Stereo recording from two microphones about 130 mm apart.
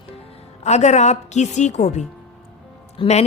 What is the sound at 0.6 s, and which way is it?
A woman's voice, 60° left (ahead or behind).